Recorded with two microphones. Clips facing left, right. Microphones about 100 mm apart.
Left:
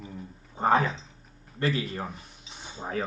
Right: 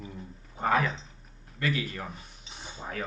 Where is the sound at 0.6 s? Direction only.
30° left (ahead or behind).